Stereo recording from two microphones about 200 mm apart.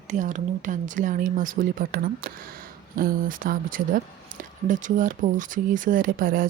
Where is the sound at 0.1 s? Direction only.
40° right (ahead or behind).